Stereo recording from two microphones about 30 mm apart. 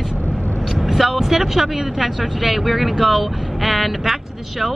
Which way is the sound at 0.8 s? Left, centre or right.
Centre.